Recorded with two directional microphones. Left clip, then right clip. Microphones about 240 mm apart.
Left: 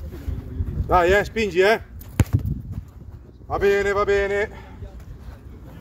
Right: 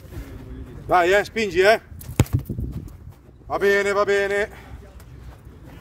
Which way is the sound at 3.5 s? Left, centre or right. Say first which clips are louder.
Even; right.